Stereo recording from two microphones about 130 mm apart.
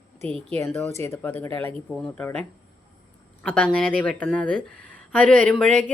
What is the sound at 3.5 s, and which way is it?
Speech, 10° left (ahead or behind).